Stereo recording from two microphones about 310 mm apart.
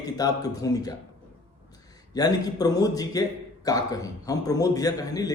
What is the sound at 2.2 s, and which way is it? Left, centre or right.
Speech, centre.